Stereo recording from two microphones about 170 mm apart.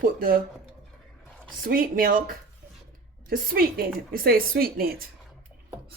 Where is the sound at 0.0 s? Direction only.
60° right (ahead or behind).